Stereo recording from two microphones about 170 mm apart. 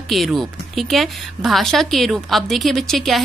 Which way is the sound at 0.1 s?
Centre (ahead or behind).